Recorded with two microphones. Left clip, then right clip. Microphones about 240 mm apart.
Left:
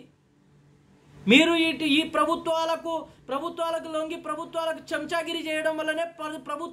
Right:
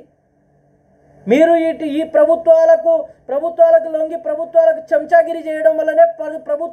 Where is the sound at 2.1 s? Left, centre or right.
Centre.